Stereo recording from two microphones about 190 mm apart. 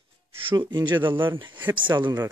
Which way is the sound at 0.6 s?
25° right (ahead or behind).